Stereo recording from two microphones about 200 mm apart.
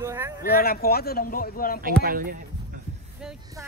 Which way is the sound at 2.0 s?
45° right (ahead or behind).